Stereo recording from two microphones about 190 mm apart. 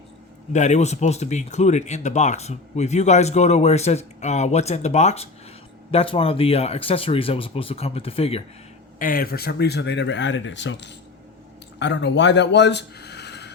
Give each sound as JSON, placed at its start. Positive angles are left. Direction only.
{"t": 0.5, "sound": "speech", "side_deg": 40}
{"t": 9.0, "sound": "speech", "side_deg": 50}